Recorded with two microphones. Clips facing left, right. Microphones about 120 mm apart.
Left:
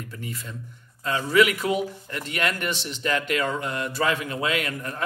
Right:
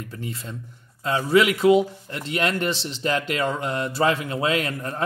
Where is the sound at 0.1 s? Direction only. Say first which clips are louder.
Right 3 dB; 30° right (ahead or behind).